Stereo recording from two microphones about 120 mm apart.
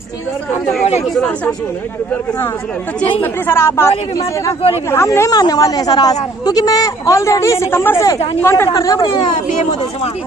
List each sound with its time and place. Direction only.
1.0 s speech: 5° left (ahead or behind)
3.2 s a man's voice: 20° left (ahead or behind)
4.9 s a woman's voice: 20° left (ahead or behind)